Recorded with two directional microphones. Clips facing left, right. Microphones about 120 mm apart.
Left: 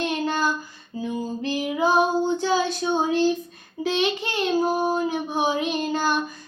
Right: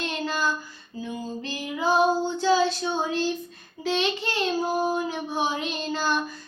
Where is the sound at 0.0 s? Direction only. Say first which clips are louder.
Left 4 dB; 20° left (ahead or behind).